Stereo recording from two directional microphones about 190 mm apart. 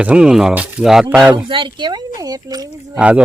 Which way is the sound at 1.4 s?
25° right (ahead or behind).